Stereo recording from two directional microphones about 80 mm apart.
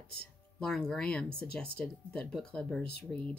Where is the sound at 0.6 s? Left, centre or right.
Centre.